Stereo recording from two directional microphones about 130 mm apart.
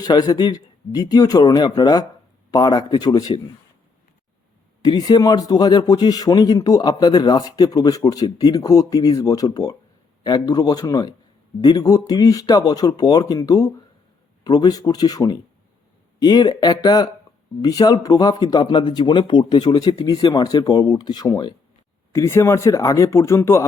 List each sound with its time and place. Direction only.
0.0 s speech: 30° left (ahead or behind)
4.8 s a man's voice: 35° left (ahead or behind)